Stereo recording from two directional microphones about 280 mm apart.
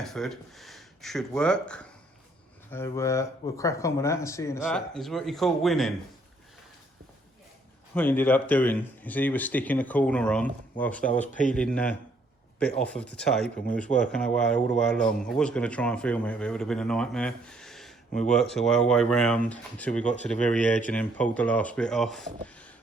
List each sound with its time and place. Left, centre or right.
0.0 s speech: centre
7.9 s speech: centre
11.3 s speech: left
11.5 s speech: centre
20.7 s speech: left
20.9 s speech: centre